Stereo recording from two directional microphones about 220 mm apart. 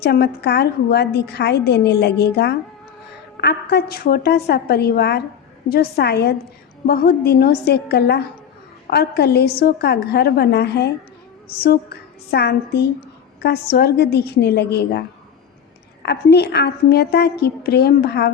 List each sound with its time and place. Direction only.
0.0 s a woman's voice: 45° left (ahead or behind)
16.0 s a woman's voice: 50° left (ahead or behind)